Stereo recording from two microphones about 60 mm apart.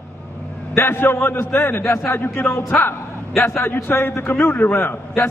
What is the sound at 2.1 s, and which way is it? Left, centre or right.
A man's voice, left.